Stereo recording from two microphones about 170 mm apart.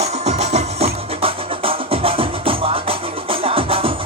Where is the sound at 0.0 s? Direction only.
40° right (ahead or behind).